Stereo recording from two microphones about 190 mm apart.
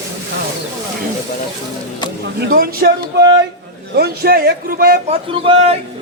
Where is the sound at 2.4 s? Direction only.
50° right (ahead or behind).